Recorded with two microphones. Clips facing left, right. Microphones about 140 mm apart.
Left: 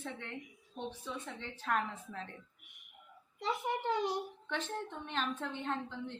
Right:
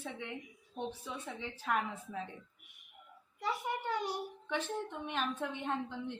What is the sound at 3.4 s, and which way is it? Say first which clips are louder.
Speech: left 1 dB; 25° left (ahead or behind).